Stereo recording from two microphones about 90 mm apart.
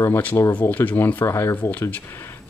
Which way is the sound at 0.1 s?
20° left (ahead or behind).